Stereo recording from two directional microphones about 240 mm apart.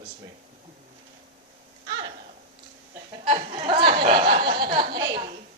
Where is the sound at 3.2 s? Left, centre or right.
Right.